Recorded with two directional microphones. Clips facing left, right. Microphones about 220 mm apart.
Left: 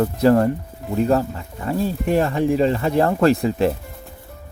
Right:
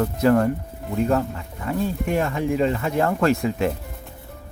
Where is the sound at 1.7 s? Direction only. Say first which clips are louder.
Left 3 dB; 35° left (ahead or behind).